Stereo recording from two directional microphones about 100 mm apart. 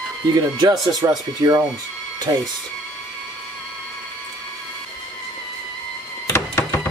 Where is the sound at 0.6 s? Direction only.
45° right (ahead or behind).